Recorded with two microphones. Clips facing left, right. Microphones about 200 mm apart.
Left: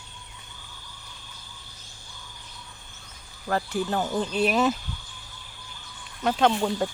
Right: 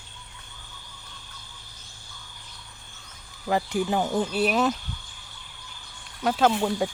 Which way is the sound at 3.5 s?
15° right (ahead or behind).